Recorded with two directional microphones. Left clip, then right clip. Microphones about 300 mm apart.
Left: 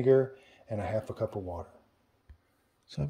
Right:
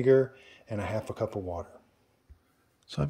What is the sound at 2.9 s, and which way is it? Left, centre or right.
Speech, centre.